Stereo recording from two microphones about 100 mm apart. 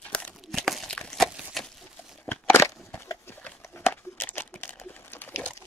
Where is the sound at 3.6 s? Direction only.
25° left (ahead or behind).